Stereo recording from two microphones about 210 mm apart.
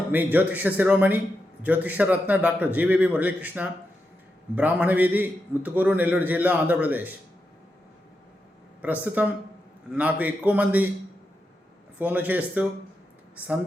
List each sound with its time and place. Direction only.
0.1 s a man's voice: 10° right (ahead or behind)
8.8 s a man's voice: 5° right (ahead or behind)
11.9 s a man's voice: 10° right (ahead or behind)